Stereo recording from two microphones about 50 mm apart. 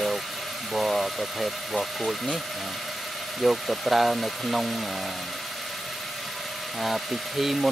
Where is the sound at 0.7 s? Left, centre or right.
Centre.